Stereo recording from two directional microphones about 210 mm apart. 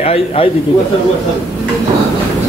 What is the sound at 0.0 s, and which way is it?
Speech, 30° left (ahead or behind).